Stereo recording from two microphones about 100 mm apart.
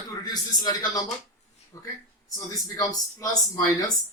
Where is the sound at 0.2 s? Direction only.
40° left (ahead or behind).